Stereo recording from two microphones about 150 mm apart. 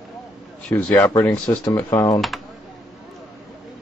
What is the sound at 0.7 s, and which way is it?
Speech, 10° left (ahead or behind).